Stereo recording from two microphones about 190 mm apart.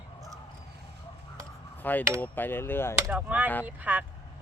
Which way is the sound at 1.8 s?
10° left (ahead or behind).